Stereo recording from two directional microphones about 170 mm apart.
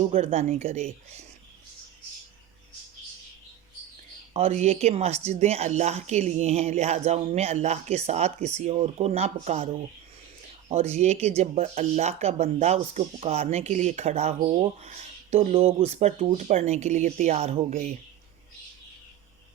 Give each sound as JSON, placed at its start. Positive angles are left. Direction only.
{"t": 0.0, "sound": "a woman's voice", "side_deg": -35}
{"t": 4.6, "sound": "a woman's voice", "side_deg": -40}
{"t": 17.7, "sound": "speech", "side_deg": -55}